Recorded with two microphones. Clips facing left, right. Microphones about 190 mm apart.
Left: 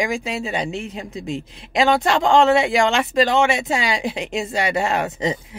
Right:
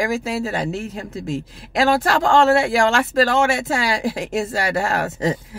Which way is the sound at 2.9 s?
20° left (ahead or behind).